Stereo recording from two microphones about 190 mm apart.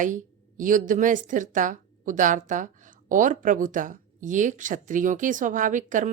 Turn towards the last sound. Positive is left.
turn(degrees=-40)  # may be behind; listen again after turning